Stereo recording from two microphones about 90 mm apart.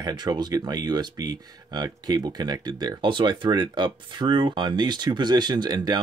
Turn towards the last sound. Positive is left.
turn(degrees=-50)  # may be behind; listen again after turning